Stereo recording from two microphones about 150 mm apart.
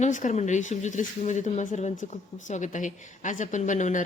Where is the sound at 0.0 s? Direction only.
55° left (ahead or behind).